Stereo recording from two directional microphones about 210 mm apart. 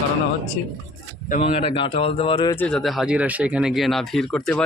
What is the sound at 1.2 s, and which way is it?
Speech, 35° left (ahead or behind).